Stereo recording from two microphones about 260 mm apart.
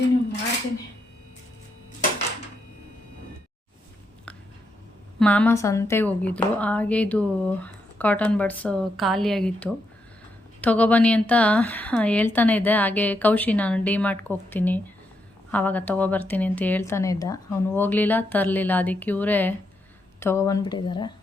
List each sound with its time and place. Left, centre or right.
5.2 s a woman's voice: centre